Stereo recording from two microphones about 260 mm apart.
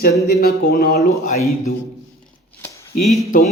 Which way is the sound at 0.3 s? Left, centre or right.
Left.